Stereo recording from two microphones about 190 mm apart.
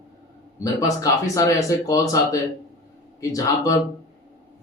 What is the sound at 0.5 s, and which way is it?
Speech, 15° left (ahead or behind).